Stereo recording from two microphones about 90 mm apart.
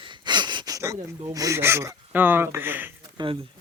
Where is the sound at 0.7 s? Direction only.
40° right (ahead or behind).